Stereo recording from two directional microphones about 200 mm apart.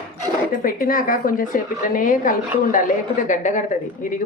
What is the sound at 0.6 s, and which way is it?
A woman's voice, 45° left (ahead or behind).